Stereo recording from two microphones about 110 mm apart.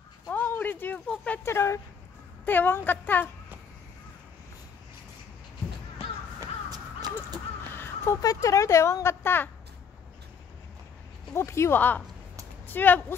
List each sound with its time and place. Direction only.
0.3 s a sound: 15° left (ahead or behind)
1.4 s speech: 25° left (ahead or behind)
6.4 s crow: 35° right (ahead or behind)
7.6 s crow: 20° left (ahead or behind)
8.2 s speech: 30° left (ahead or behind)
11.3 s speech: 25° left (ahead or behind)